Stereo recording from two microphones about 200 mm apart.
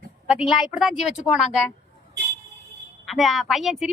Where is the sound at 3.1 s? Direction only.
Centre (ahead or behind).